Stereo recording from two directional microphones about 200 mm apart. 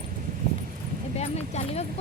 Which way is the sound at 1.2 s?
30° left (ahead or behind).